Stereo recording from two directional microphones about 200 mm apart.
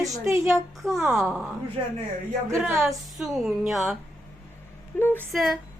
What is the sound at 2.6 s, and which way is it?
Speech, 5° right (ahead or behind).